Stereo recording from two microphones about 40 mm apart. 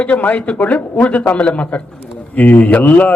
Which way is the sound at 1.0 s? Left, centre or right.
Left.